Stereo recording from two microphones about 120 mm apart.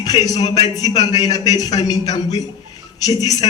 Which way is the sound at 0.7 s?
30° left (ahead or behind).